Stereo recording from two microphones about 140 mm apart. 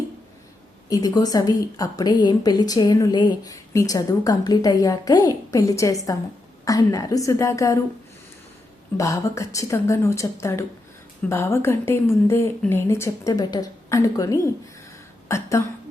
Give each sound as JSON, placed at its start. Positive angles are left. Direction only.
{"t": 0.9, "sound": "a woman's voice", "side_deg": 25}
{"t": 9.0, "sound": "a woman's voice", "side_deg": 25}